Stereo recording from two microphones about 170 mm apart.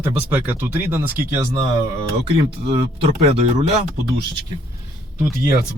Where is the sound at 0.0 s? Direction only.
10° right (ahead or behind).